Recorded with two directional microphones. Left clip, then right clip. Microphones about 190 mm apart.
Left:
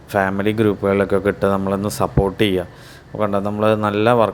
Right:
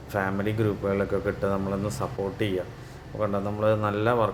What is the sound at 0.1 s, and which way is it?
A man's voice, 35° left (ahead or behind).